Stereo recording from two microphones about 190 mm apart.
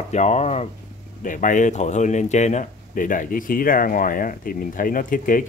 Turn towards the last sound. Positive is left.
turn(degrees=45)  # may be behind; listen again after turning